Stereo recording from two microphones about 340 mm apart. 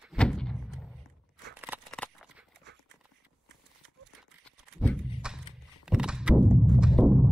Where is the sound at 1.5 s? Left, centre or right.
Centre.